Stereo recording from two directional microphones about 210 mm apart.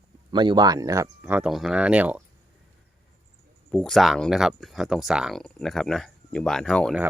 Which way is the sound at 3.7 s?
5° left (ahead or behind).